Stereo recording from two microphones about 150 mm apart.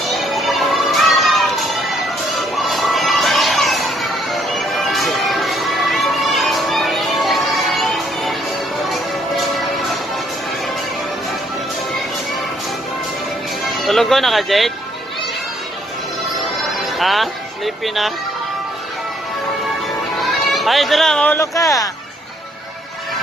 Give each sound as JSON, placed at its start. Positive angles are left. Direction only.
{"t": 0.1, "sound": "children playing", "side_deg": 0}
{"t": 8.8, "sound": "music", "side_deg": 0}
{"t": 13.7, "sound": "speech", "side_deg": 0}
{"t": 16.3, "sound": "music", "side_deg": 0}
{"t": 20.2, "sound": "goat", "side_deg": 0}
{"t": 21.4, "sound": "speech", "side_deg": 20}